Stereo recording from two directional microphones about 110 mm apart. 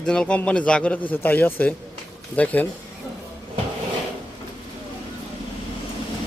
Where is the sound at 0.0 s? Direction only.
5° left (ahead or behind).